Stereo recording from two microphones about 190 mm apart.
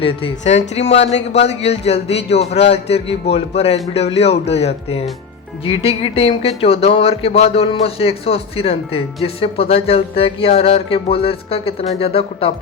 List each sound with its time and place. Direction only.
0.0 s speech: 30° left (ahead or behind)